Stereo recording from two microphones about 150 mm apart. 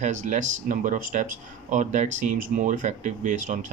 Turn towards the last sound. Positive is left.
turn(degrees=-55)  # may be behind; listen again after turning